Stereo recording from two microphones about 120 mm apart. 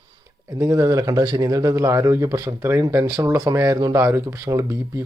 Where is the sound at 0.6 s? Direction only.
30° right (ahead or behind).